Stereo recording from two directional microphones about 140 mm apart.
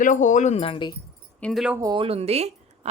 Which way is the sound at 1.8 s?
35° right (ahead or behind).